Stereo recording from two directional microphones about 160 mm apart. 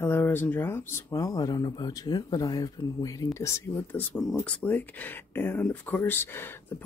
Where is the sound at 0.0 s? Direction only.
15° left (ahead or behind).